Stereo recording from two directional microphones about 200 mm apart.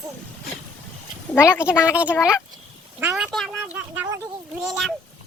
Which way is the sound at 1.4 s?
5° right (ahead or behind).